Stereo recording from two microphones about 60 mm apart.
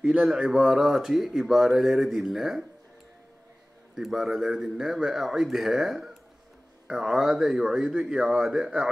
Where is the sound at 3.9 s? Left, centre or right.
Centre.